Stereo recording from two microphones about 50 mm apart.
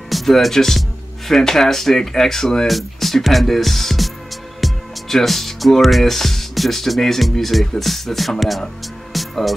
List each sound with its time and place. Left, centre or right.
0.1 s speech: centre
9.1 s music: centre